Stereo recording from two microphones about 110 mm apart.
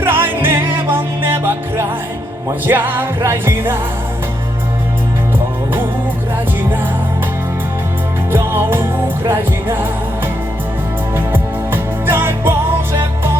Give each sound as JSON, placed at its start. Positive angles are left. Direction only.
{"t": 0.0, "sound": "music", "side_deg": -20}
{"t": 6.6, "sound": "music", "side_deg": -20}
{"t": 8.3, "sound": "music", "side_deg": -20}
{"t": 11.1, "sound": "music", "side_deg": -20}